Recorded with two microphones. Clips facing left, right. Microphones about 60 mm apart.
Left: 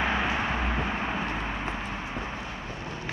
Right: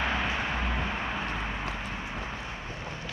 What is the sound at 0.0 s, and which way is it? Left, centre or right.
Vehicle, left.